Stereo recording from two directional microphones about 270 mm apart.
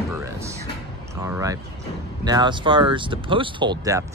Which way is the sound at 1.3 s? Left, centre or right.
Centre.